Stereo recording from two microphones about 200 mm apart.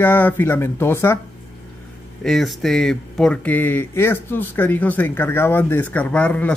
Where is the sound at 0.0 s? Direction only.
10° left (ahead or behind).